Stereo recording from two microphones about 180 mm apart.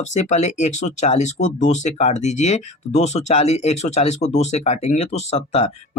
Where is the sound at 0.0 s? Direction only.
40° left (ahead or behind).